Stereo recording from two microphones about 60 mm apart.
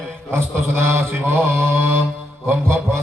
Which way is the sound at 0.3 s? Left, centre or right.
Right.